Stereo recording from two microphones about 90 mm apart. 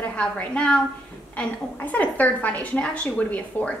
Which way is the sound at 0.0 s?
15° left (ahead or behind).